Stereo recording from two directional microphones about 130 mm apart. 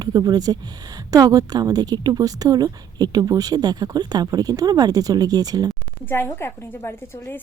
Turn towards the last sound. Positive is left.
turn(degrees=15)  # may be behind; listen again after turning